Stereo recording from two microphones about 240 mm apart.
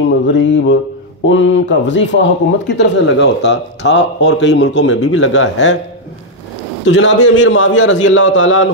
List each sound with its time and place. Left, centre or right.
0.3 s speech: left
5.0 s speech: left
6.9 s speech: left